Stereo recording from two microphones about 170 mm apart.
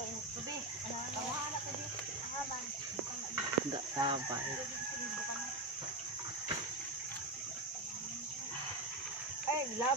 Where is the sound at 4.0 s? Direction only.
30° right (ahead or behind).